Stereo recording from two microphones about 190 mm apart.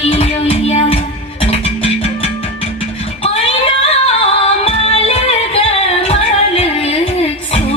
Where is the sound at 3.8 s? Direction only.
30° left (ahead or behind).